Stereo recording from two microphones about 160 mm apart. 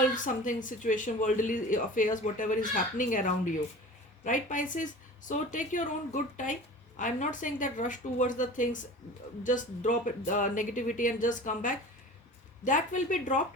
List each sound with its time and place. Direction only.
0.3 s speech: 55° left (ahead or behind)